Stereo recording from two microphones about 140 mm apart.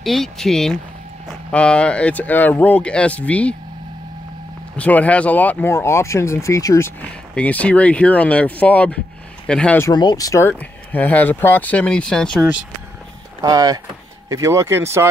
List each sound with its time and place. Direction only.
0.0 s speech: centre (ahead or behind)
4.7 s speech: 10° left (ahead or behind)
7.0 s speech: 10° left (ahead or behind)
9.8 s speech: 25° left (ahead or behind)
10.6 s speech: 10° left (ahead or behind)
13.4 s speech: 25° right (ahead or behind)